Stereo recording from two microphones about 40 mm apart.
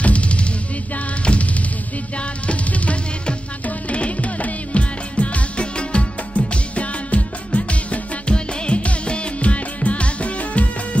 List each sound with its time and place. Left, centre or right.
0.0 s music: left